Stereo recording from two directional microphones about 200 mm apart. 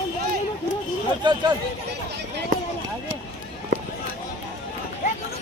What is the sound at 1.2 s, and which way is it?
Speech, 20° right (ahead or behind).